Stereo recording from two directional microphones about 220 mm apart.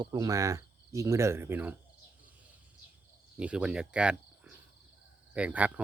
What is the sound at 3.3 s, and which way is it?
Speech, 5° right (ahead or behind).